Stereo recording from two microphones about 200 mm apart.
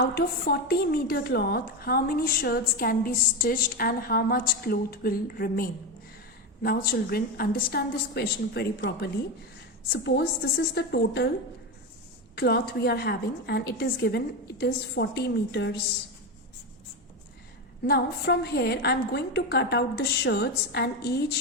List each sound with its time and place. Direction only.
0.0 s a woman's voice: 50° left (ahead or behind)
12.4 s a woman's voice: 50° left (ahead or behind)
17.8 s a woman's voice: 50° left (ahead or behind)